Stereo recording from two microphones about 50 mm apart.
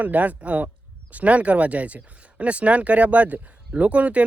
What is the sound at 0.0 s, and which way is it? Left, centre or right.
Speech, right.